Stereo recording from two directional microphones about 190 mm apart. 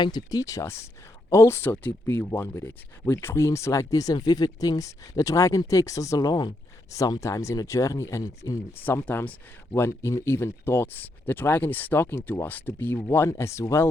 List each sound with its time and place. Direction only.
0.0 s speech: 20° left (ahead or behind)